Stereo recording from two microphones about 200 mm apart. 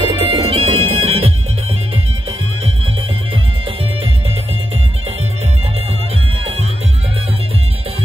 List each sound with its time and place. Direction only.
0.1 s music: 30° right (ahead or behind)